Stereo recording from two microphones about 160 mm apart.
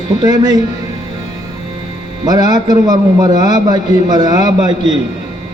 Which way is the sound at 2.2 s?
25° right (ahead or behind).